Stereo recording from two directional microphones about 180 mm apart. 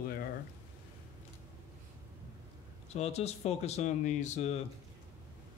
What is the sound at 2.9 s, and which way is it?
Speech, 35° left (ahead or behind).